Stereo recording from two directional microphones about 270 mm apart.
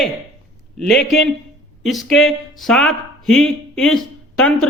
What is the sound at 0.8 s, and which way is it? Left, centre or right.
A man's voice, centre.